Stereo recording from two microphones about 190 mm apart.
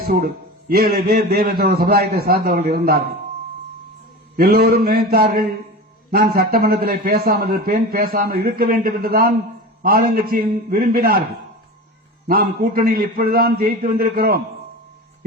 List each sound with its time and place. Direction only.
0.7 s a man's voice: 55° right (ahead or behind)
4.4 s a man's voice: 55° right (ahead or behind)
12.3 s a man's voice: 50° right (ahead or behind)